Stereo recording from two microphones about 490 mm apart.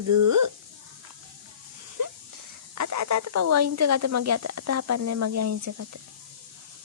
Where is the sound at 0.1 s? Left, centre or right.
Right.